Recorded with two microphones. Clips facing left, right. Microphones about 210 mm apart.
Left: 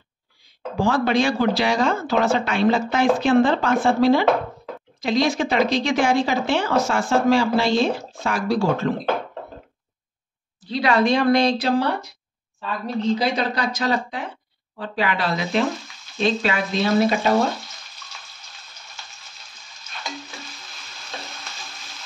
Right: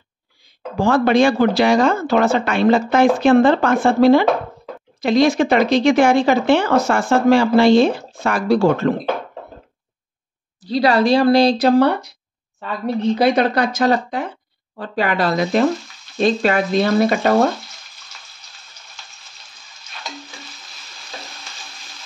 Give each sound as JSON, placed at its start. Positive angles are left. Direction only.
{"t": 0.7, "sound": "speech", "side_deg": -55}
{"t": 10.6, "sound": "speech", "side_deg": -35}
{"t": 12.5, "sound": "speech", "side_deg": -60}